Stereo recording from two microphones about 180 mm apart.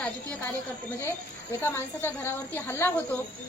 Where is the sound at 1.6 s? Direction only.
15° left (ahead or behind).